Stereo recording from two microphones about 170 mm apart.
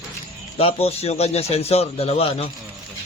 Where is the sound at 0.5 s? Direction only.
35° left (ahead or behind).